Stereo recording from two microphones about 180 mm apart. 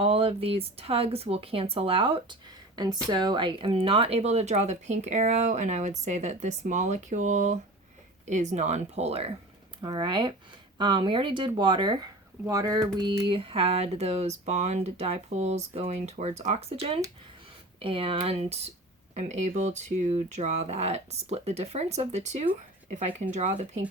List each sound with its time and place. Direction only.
0.0 s speech: 30° right (ahead or behind)
9.8 s speech: 25° right (ahead or behind); by 23.6 s 40° right (ahead or behind)